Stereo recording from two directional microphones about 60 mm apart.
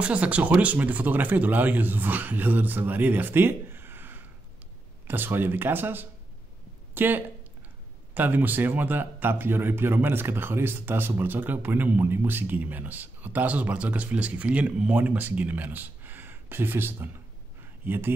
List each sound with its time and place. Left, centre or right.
0.0 s speech: right